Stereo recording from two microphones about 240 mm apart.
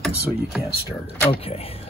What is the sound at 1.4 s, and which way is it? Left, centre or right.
Speech, left.